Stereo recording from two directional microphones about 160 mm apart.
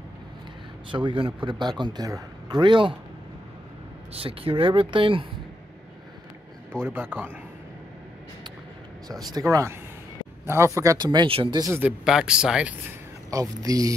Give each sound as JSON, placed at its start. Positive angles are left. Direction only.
{"t": 0.9, "sound": "a man's voice", "side_deg": -30}
{"t": 4.1, "sound": "speech", "side_deg": -35}
{"t": 6.7, "sound": "speech", "side_deg": -15}
{"t": 9.2, "sound": "a man's voice", "side_deg": -25}
{"t": 11.8, "sound": "speech", "side_deg": -5}
{"t": 13.3, "sound": "a man's voice", "side_deg": -20}